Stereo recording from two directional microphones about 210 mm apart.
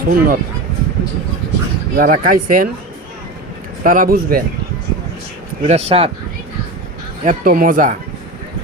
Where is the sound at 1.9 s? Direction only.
40° right (ahead or behind).